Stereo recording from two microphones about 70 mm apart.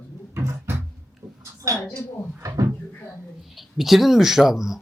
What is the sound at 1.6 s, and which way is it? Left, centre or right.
Speech, right.